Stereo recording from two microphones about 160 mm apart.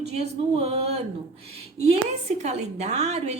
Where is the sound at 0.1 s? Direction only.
40° right (ahead or behind).